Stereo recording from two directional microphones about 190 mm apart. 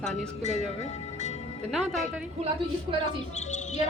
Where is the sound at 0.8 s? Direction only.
35° left (ahead or behind).